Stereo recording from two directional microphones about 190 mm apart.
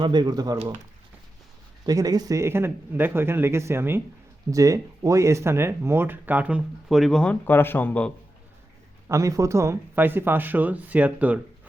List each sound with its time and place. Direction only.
0.0 s speech: 25° right (ahead or behind)
1.8 s speech: 20° right (ahead or behind); by 8.1 s 10° left (ahead or behind)
9.0 s speech: 15° right (ahead or behind)